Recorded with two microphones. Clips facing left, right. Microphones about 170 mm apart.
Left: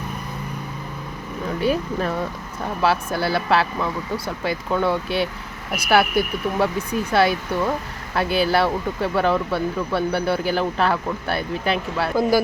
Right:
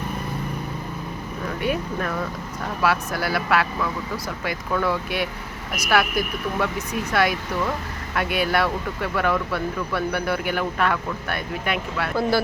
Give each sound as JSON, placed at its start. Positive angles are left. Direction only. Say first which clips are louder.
{"t": 1.6, "sound": "speech", "louder": "left 4 dB", "side_deg": 30}